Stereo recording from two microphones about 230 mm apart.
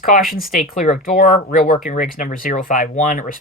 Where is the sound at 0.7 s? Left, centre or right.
Left.